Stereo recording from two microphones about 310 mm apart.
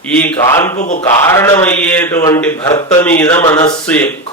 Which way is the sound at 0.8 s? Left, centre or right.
Left.